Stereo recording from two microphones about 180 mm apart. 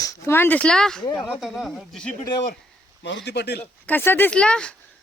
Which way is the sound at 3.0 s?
75° left (ahead or behind).